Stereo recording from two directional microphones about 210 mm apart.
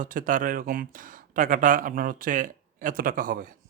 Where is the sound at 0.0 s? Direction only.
40° right (ahead or behind).